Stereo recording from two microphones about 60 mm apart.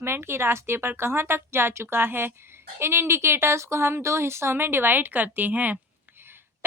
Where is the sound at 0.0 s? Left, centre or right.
Right.